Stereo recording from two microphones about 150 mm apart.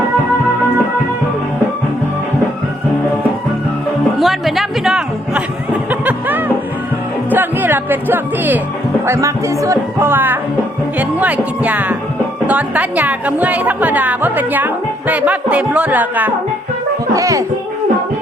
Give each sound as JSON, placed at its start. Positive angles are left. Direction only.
{"t": 4.2, "sound": "music", "side_deg": 0}
{"t": 9.0, "sound": "a woman's voice", "side_deg": -20}
{"t": 17.2, "sound": "speech", "side_deg": -20}